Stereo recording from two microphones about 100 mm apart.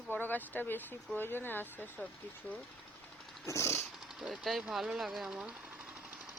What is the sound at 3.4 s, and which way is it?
Vehicle, 30° left (ahead or behind).